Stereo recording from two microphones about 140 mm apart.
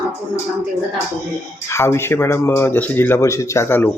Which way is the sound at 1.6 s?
20° left (ahead or behind).